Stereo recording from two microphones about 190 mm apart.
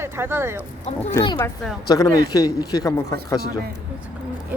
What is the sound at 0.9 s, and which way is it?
Speech, 35° left (ahead or behind).